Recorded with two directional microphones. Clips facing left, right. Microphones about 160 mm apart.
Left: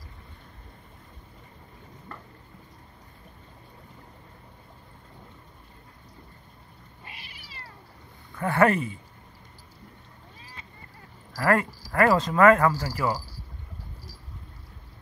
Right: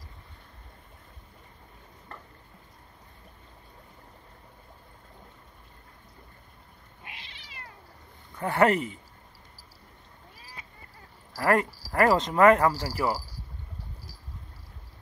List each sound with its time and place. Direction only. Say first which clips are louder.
8.4 s speech: left 1 dB; 20° right (ahead or behind)
10.4 s a sound: even; 10° right (ahead or behind)
11.3 s speech: left 1 dB; 15° right (ahead or behind)